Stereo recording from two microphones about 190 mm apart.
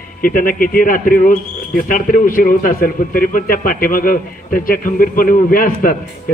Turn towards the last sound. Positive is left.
turn(degrees=45)  # may be behind; listen again after turning